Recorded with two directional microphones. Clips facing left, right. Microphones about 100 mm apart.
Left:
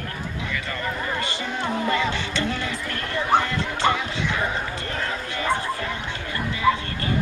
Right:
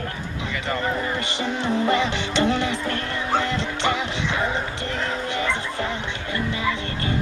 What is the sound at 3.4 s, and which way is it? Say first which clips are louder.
Music: left 1 dB; 20° right (ahead or behind).